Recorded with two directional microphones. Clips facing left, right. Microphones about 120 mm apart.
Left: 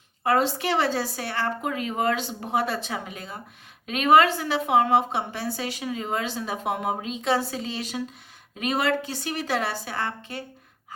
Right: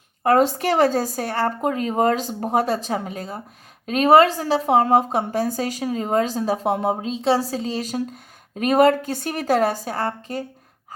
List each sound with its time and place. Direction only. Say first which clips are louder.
0.2 s a woman's voice: right 5 dB; 45° right (ahead or behind)